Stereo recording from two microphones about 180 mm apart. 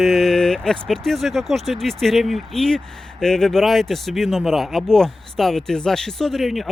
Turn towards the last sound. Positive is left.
turn(degrees=0)  # may be behind; listen again after turning